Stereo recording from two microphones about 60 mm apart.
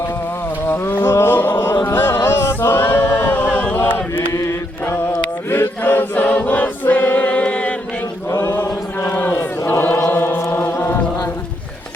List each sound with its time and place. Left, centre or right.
0.7 s a sound: left
1.9 s choir: left
3.8 s chant: left
5.5 s choir: left
8.3 s chant: left
9.0 s chant: left